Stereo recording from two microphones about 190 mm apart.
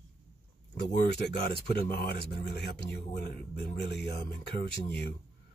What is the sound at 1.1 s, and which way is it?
Speech, 60° left (ahead or behind).